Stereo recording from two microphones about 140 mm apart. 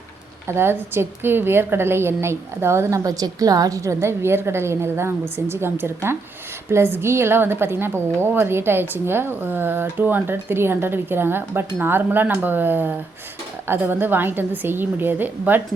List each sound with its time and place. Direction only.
0.4 s a woman's voice: 15° right (ahead or behind)